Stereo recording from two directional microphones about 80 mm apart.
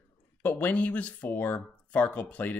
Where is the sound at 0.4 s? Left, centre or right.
Left.